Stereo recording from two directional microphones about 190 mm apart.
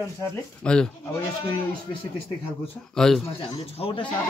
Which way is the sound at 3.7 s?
30° left (ahead or behind).